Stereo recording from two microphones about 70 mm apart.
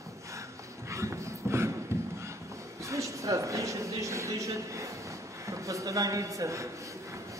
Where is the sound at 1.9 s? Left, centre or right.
Right.